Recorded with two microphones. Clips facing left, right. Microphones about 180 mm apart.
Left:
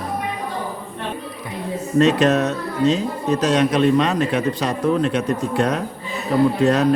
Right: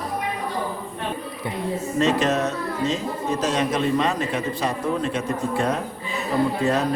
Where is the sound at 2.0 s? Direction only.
65° left (ahead or behind).